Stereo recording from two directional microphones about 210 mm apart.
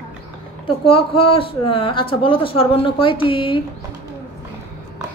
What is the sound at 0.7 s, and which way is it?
A woman's voice, 25° left (ahead or behind).